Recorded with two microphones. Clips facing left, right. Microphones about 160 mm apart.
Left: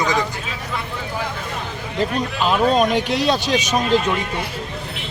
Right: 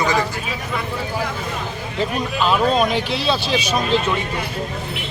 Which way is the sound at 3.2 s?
5° right (ahead or behind).